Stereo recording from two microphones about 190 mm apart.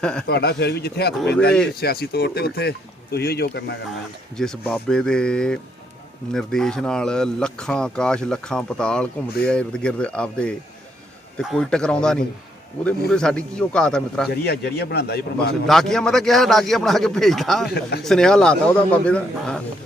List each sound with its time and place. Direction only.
0.0 s speech: 5° left (ahead or behind)
0.3 s speech: 60° left (ahead or behind)
4.4 s speech: 5° left (ahead or behind)
14.3 s speech: 60° left (ahead or behind)
15.6 s speech: centre (ahead or behind)